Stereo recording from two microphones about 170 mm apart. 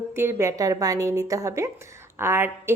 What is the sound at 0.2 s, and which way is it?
A woman's voice, 15° right (ahead or behind).